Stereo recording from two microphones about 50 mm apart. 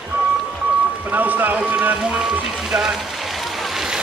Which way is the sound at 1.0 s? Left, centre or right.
Right.